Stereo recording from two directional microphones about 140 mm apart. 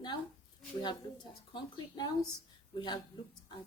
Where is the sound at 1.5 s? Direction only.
30° left (ahead or behind).